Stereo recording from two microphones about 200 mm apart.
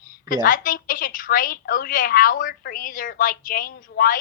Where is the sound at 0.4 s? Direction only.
40° left (ahead or behind).